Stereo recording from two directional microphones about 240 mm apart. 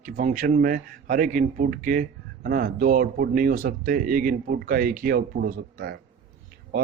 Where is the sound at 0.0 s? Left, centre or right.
Right.